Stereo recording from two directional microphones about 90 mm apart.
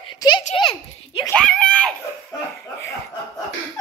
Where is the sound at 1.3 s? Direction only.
10° left (ahead or behind).